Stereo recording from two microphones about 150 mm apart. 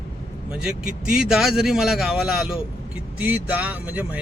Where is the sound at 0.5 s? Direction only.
5° right (ahead or behind).